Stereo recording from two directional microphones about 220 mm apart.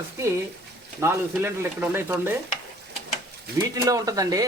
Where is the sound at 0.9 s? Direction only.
10° right (ahead or behind).